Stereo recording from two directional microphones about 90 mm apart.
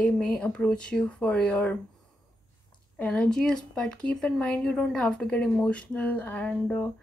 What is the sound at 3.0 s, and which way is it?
Speech, 10° left (ahead or behind).